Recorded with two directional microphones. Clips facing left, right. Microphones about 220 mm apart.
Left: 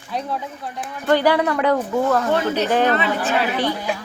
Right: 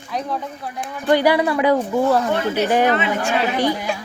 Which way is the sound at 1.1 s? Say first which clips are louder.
Right 1 dB; 10° right (ahead or behind).